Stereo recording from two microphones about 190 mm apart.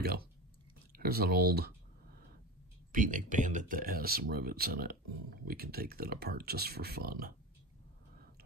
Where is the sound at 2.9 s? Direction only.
45° right (ahead or behind).